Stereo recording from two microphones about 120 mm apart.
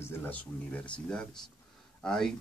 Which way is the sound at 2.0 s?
5° left (ahead or behind).